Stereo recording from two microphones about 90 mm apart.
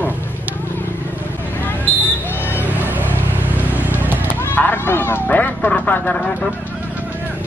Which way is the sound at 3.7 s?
20° right (ahead or behind).